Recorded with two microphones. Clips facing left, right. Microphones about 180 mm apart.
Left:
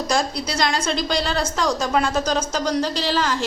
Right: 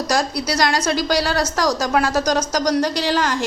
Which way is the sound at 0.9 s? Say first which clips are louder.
Right 3 dB; 5° right (ahead or behind).